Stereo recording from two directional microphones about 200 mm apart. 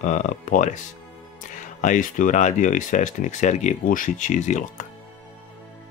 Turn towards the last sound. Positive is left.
turn(degrees=35)  # may be behind; listen again after turning